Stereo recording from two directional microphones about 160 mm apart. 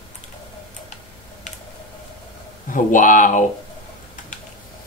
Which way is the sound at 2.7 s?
55° left (ahead or behind).